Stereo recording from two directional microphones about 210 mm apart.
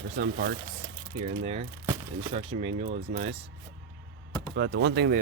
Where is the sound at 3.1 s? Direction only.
35° right (ahead or behind).